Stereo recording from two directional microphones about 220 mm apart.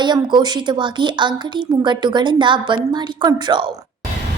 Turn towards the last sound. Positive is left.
turn(degrees=-20)  # may be behind; listen again after turning